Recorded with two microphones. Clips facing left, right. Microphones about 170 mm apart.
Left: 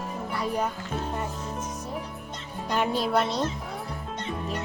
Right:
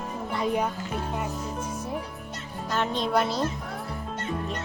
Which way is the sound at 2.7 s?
10° left (ahead or behind).